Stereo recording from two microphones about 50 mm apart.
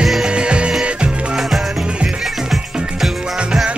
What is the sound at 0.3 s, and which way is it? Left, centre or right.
Music, right.